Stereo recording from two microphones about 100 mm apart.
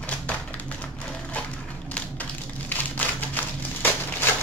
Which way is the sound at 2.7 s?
15° left (ahead or behind).